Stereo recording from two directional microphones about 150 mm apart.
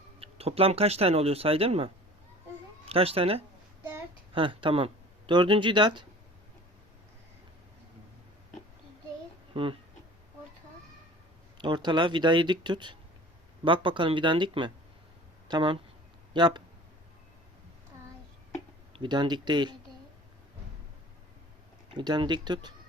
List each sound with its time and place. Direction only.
0.2 s speech: 40° right (ahead or behind)
9.5 s speech: 35° right (ahead or behind)
11.5 s speech: 30° right (ahead or behind)
18.9 s speech: 30° right (ahead or behind)
21.9 s speech: 30° right (ahead or behind)